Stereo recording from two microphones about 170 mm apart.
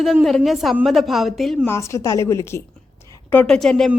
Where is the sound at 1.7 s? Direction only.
15° left (ahead or behind).